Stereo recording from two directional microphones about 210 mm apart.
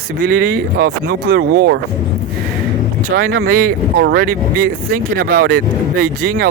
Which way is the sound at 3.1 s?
50° right (ahead or behind).